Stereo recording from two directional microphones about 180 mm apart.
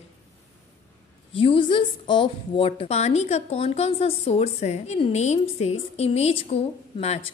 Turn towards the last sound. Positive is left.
turn(degrees=35)  # may be behind; listen again after turning